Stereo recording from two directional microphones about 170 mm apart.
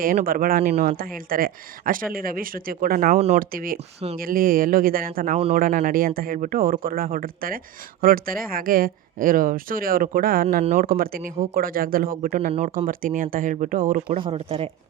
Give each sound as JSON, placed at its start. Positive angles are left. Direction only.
{"t": 0.0, "sound": "speech", "side_deg": -55}
{"t": 10.6, "sound": "speech", "side_deg": -40}
{"t": 10.8, "sound": "speech", "side_deg": -60}
{"t": 12.5, "sound": "speech", "side_deg": -40}
{"t": 14.2, "sound": "speech", "side_deg": -35}